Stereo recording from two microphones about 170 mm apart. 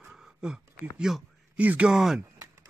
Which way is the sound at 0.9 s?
5° right (ahead or behind).